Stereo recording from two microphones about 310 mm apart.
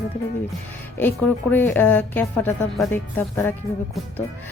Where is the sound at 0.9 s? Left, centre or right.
Centre.